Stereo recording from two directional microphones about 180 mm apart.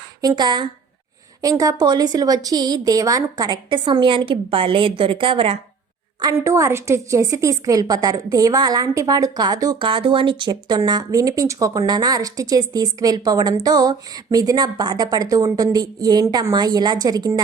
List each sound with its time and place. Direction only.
0.2 s a woman's voice: 20° right (ahead or behind)
6.2 s a woman's voice: 15° right (ahead or behind)